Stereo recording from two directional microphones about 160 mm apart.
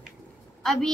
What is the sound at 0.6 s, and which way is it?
Speech, 5° left (ahead or behind).